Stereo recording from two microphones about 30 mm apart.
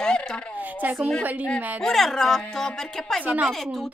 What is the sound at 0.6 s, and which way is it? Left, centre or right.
Speech, right.